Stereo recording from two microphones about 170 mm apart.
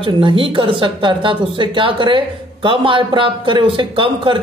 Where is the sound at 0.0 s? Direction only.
30° right (ahead or behind).